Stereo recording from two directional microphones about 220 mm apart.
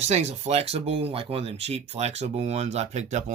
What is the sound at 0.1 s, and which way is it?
Speech, 30° right (ahead or behind).